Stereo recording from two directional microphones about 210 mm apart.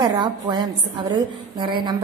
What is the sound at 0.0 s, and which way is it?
A woman's voice, 20° right (ahead or behind).